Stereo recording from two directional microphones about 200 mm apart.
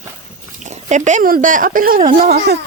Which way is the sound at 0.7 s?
35° right (ahead or behind).